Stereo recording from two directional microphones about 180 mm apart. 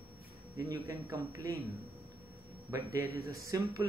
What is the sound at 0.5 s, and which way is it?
Speech, 20° right (ahead or behind).